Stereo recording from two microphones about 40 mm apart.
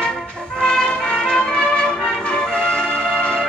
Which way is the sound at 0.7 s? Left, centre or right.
Centre.